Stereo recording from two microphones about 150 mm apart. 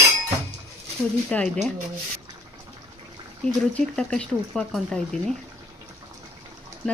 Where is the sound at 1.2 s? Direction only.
5° left (ahead or behind).